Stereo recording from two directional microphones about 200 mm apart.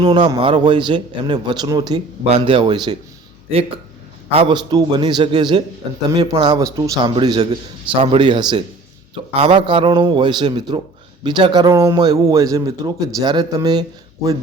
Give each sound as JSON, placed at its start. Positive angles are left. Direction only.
{"t": 0.0, "sound": "a man's voice", "side_deg": -25}
{"t": 4.4, "sound": "a man's voice", "side_deg": -25}